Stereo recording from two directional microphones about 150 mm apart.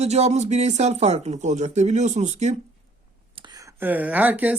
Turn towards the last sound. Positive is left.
turn(degrees=-10)  # may be behind; listen again after turning